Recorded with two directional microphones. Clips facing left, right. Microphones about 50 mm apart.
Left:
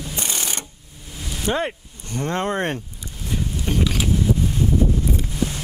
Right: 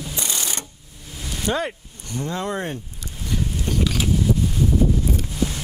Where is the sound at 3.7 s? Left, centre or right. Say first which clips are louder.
Left 2 dB; left.